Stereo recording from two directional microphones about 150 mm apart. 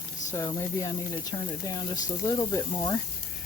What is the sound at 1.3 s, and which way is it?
Speech, 30° left (ahead or behind).